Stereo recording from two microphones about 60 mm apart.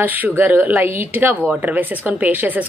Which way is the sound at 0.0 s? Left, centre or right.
Right.